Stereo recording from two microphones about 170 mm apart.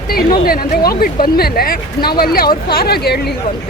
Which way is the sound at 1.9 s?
25° left (ahead or behind).